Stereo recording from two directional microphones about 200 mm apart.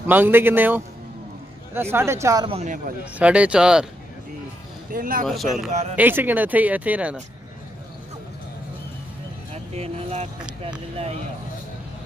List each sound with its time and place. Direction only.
0.0 s speech: 10° right (ahead or behind)
2.5 s speech: 35° right (ahead or behind)
3.2 s speech: 5° right (ahead or behind)
4.9 s speech: 45° right (ahead or behind)
5.2 s speech: centre (ahead or behind)
5.7 s speech: 35° right (ahead or behind)
5.9 s speech: 10° right (ahead or behind)
9.5 s speech: 30° right (ahead or behind)